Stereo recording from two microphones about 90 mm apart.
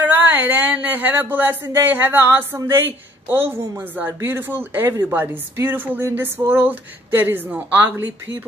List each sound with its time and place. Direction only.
0.0 s speech: 20° right (ahead or behind)